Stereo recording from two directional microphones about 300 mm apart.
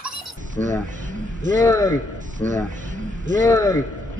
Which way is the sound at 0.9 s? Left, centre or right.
Right.